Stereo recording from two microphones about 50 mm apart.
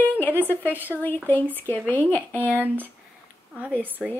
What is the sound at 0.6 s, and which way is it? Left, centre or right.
Speech, left.